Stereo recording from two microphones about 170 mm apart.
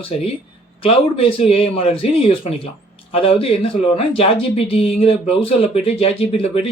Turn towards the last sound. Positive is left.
turn(degrees=35)  # may be behind; listen again after turning